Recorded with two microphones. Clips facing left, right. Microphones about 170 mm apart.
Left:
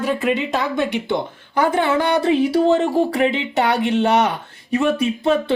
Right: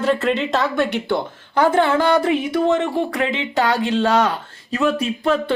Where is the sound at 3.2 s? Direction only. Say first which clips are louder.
Left 2 dB; 25° left (ahead or behind).